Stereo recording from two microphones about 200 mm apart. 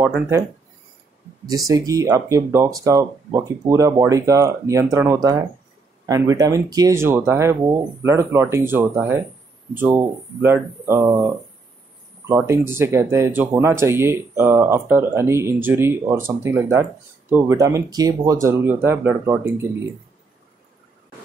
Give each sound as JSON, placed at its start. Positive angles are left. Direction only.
{"t": 1.4, "sound": "speech", "side_deg": -20}